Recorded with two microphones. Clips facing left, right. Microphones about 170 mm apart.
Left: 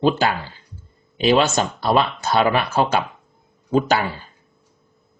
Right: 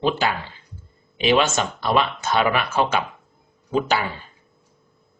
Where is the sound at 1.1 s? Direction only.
40° left (ahead or behind).